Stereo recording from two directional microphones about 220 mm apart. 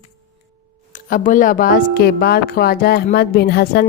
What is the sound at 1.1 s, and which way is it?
A woman's voice, 35° left (ahead or behind).